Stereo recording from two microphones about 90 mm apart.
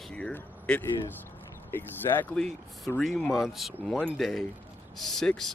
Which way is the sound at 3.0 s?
Centre (ahead or behind).